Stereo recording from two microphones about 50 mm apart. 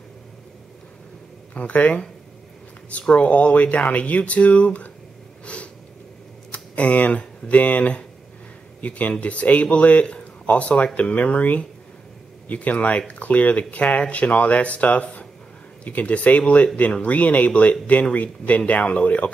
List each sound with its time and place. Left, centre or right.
1.5 s speech: left
5.4 s snort: left
6.5 s speech: left